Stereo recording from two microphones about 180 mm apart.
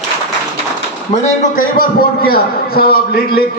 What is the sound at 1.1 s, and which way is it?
A man's voice, 45° left (ahead or behind).